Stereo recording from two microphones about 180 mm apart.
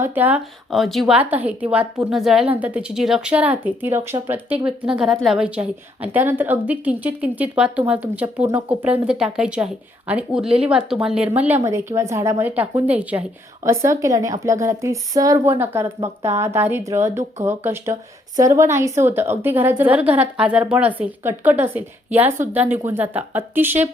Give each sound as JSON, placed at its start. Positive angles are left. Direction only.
{"t": 0.0, "sound": "a woman's voice", "side_deg": -10}